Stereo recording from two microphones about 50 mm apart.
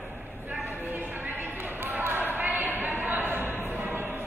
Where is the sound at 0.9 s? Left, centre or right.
Right.